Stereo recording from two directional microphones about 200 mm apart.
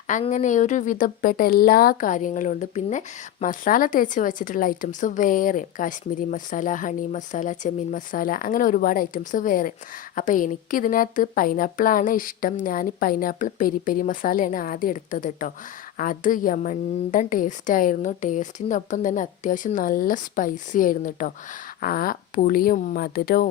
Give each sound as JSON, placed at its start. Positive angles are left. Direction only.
{"t": 0.1, "sound": "a woman's voice", "side_deg": 35}